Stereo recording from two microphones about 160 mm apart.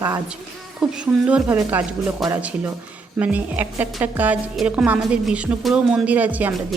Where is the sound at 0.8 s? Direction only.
5° right (ahead or behind).